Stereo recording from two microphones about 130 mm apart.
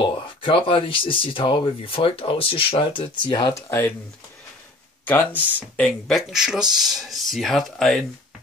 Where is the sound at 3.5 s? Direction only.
20° left (ahead or behind).